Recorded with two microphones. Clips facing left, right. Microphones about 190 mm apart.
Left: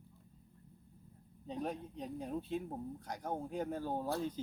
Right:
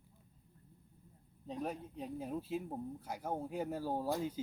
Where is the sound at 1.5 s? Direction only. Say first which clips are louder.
Left 1 dB; centre (ahead or behind).